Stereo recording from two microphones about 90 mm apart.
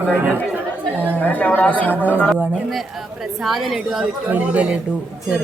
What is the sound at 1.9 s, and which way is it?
Speech, 20° right (ahead or behind).